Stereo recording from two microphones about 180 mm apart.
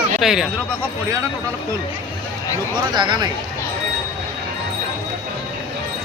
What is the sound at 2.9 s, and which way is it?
Speech, 25° right (ahead or behind).